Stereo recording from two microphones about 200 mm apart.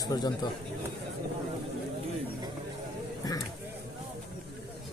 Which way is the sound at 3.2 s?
20° left (ahead or behind).